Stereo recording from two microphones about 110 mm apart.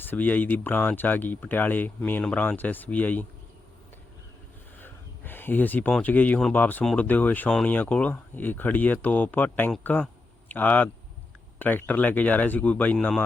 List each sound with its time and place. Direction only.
0.1 s speech: 15° left (ahead or behind)
4.8 s a sound: 20° left (ahead or behind)
6.0 s speech: 15° left (ahead or behind)